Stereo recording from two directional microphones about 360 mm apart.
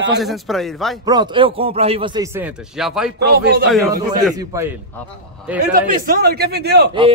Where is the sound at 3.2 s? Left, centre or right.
Right.